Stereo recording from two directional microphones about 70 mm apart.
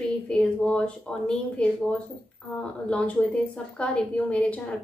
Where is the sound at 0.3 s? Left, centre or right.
Centre.